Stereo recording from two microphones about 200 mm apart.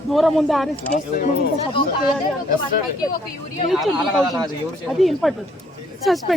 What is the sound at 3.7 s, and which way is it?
Speech, centre (ahead or behind).